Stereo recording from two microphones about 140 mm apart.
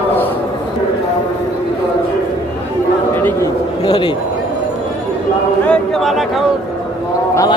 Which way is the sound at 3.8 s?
30° left (ahead or behind).